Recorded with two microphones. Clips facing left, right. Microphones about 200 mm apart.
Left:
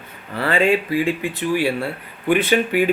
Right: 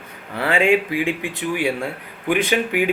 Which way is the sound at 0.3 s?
15° right (ahead or behind).